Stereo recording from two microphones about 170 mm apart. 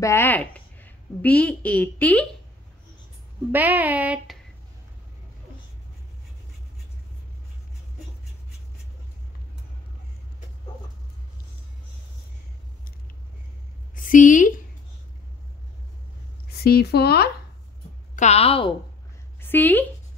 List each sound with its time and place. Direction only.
0.0 s a woman's voice: 15° left (ahead or behind)
3.5 s speech: 10° right (ahead or behind)
13.9 s a woman's voice: 50° left (ahead or behind)
16.4 s speech: 65° left (ahead or behind)
18.1 s a woman's voice: 40° left (ahead or behind)
19.4 s speech: 10° left (ahead or behind)